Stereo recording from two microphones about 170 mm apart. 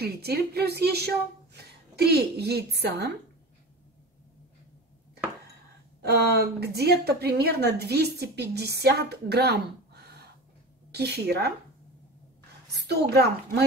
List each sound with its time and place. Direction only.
0.0 s a woman's voice: 70° right (ahead or behind)
6.0 s a woman's voice: 70° right (ahead or behind)
12.8 s a woman's voice: 75° right (ahead or behind)